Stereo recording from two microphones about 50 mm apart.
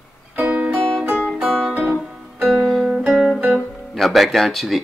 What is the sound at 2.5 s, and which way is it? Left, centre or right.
Music, centre.